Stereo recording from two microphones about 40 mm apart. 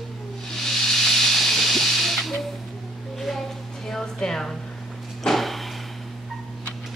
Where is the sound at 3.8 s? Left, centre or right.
Centre.